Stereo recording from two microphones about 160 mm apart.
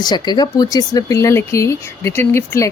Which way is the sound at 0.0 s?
25° left (ahead or behind).